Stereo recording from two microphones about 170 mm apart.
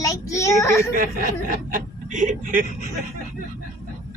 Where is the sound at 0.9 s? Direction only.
55° right (ahead or behind).